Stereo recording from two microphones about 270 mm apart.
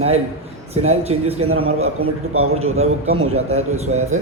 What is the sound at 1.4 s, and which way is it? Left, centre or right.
Speech, right.